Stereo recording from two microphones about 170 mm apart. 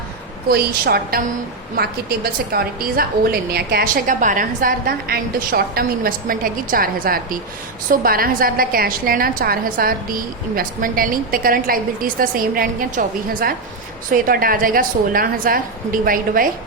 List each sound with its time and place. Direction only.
0.4 s a woman's voice: 65° right (ahead or behind)